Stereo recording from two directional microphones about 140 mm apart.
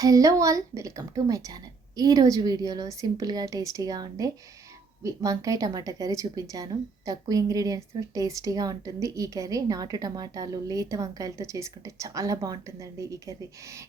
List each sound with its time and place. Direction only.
0.0 s speech: 25° right (ahead or behind)